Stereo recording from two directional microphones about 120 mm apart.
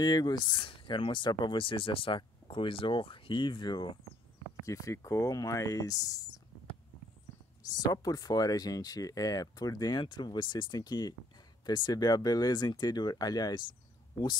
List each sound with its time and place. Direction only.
0.0 s speech: 35° left (ahead or behind)
4.6 s speech: 25° left (ahead or behind)
7.9 s speech: 30° left (ahead or behind)